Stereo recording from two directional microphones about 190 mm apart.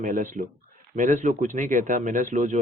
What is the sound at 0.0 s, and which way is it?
A man's voice, 45° right (ahead or behind).